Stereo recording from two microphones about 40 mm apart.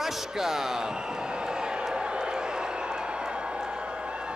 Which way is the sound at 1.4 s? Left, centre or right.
Centre.